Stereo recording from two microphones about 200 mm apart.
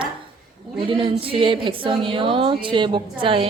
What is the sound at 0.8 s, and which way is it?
A woman's voice, 25° right (ahead or behind).